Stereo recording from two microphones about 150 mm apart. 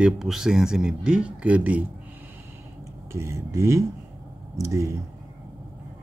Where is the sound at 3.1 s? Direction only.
20° right (ahead or behind).